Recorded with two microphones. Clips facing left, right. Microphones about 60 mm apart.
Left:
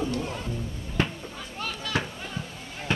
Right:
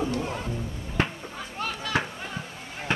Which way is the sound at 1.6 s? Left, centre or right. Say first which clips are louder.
Right 2 dB; right.